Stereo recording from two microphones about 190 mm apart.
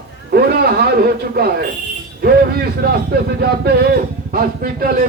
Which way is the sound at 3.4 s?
60° right (ahead or behind).